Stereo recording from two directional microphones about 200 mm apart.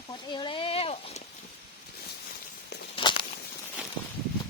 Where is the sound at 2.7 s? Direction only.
55° left (ahead or behind).